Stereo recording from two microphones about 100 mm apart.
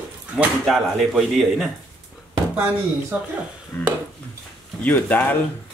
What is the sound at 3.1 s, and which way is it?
Speech, 15° right (ahead or behind).